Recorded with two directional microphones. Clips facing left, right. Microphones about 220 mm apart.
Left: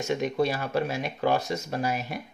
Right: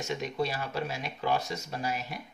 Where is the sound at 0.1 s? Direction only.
55° left (ahead or behind).